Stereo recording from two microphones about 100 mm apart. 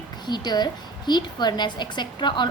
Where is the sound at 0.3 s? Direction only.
45° left (ahead or behind).